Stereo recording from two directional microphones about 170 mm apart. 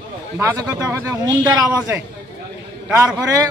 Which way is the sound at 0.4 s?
15° right (ahead or behind).